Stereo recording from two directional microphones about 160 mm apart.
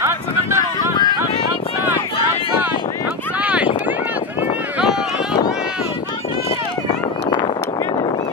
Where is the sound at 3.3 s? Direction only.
10° right (ahead or behind).